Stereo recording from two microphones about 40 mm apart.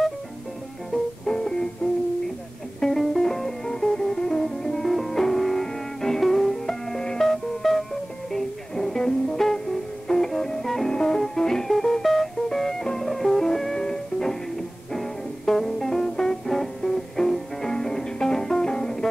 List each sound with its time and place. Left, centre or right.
1.2 s music: centre
2.8 s music: centre
10.9 s music: centre
14.9 s music: centre